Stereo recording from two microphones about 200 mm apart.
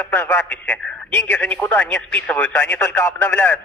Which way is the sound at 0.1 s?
10° left (ahead or behind).